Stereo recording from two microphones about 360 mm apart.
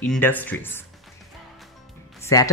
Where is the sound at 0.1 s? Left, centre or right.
Centre.